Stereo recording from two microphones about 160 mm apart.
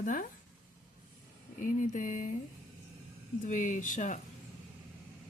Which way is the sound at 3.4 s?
50° left (ahead or behind).